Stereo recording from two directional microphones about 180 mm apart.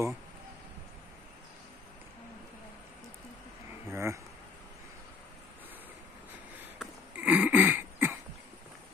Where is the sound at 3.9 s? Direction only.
15° right (ahead or behind).